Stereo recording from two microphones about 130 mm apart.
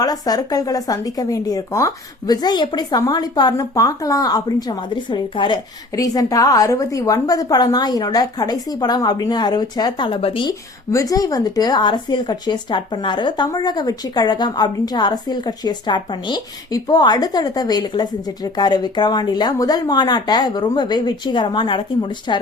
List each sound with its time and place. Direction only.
0.0 s speech: 30° left (ahead or behind)
6.0 s speech: 25° left (ahead or behind); by 10.5 s 45° left (ahead or behind)
10.9 s speech: 25° left (ahead or behind)